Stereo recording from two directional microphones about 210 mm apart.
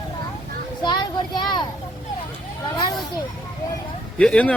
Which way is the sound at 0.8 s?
20° left (ahead or behind).